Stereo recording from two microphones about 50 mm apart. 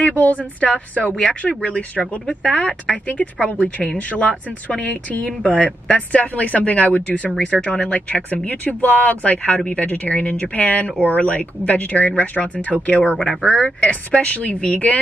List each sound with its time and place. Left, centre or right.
0.0 s a woman's voice: left
13.2 s a woman's voice: centre